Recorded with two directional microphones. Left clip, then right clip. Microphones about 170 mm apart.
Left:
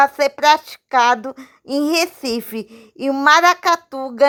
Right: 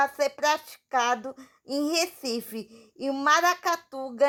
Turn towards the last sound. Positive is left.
turn(degrees=30)  # may be behind; listen again after turning